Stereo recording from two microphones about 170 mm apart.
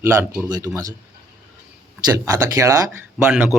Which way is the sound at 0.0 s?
15° right (ahead or behind).